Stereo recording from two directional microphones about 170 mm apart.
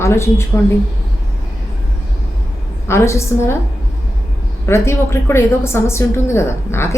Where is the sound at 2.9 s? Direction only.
15° left (ahead or behind).